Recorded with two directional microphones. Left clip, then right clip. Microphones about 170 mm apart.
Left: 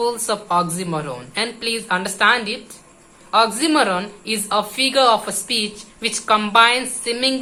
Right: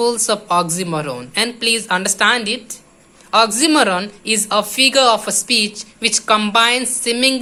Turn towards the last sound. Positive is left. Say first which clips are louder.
# right 4 dB
turn(degrees=-40)  # may be behind; listen again after turning